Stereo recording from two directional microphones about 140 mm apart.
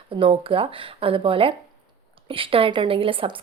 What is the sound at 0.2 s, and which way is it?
A woman's voice, 40° right (ahead or behind).